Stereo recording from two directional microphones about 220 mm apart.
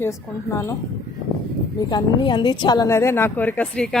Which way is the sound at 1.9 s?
20° left (ahead or behind).